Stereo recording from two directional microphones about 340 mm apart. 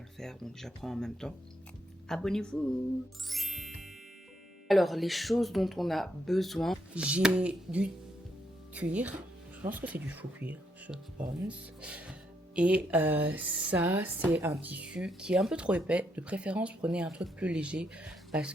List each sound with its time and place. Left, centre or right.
0.2 s speech: centre
3.2 s music: centre
4.7 s speech: centre